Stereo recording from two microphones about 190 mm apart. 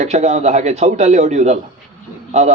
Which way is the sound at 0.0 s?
35° right (ahead or behind).